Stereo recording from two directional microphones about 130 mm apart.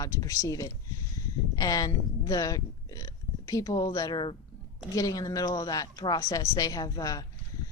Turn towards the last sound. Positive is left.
turn(degrees=30)  # may be behind; listen again after turning